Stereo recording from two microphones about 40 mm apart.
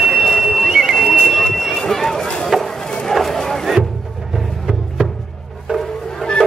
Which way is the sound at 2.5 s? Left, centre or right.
Centre.